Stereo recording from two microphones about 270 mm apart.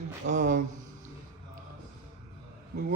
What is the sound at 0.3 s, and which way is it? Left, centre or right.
Speech, right.